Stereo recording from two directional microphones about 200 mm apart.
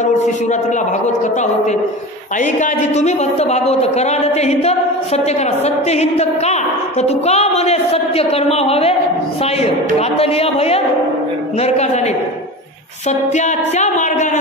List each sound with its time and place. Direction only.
0.0 s a woman's voice: 35° left (ahead or behind)
13.1 s a woman's voice: 35° left (ahead or behind)